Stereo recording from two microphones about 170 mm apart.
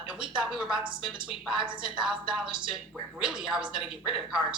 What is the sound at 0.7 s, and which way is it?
Speech, 30° right (ahead or behind).